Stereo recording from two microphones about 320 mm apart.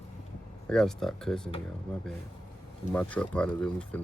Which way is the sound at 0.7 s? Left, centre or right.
Centre.